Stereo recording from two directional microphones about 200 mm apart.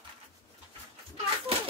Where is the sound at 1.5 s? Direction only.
30° right (ahead or behind).